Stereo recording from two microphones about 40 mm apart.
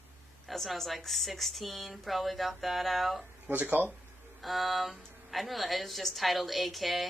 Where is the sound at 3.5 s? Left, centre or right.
Right.